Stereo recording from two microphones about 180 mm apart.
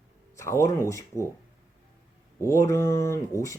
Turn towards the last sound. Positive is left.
turn(degrees=15)  # may be behind; listen again after turning